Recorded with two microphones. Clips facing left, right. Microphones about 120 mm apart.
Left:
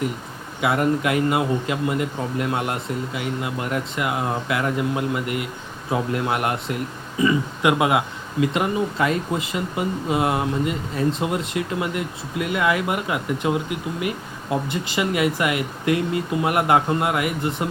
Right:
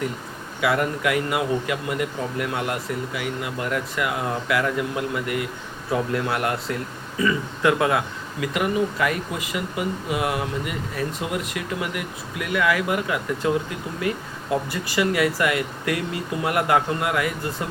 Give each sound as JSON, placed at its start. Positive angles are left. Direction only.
{"t": 0.6, "sound": "speech", "side_deg": 25}